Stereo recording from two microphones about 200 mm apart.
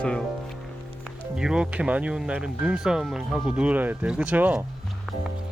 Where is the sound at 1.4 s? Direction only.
5° right (ahead or behind).